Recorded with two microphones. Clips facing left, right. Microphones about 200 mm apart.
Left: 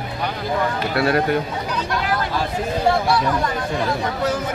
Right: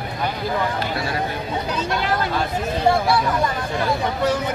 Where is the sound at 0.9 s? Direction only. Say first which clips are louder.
Left 7 dB; 65° left (ahead or behind).